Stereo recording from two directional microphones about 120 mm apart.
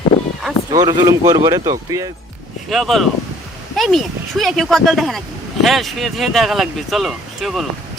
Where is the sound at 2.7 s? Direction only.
Centre (ahead or behind).